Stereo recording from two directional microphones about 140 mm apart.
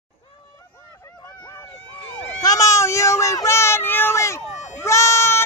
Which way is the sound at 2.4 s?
25° left (ahead or behind).